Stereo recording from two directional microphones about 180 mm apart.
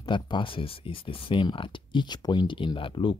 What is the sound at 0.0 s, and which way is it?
Speech, 25° left (ahead or behind).